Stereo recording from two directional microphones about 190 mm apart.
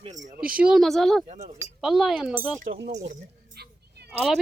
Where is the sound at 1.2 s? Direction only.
35° right (ahead or behind).